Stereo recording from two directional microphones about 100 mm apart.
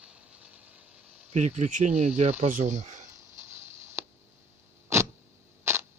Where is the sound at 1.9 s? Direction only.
90° right.